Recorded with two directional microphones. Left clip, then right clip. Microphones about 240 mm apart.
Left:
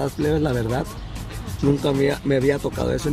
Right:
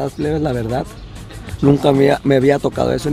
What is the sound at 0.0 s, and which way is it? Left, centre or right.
Speech, centre.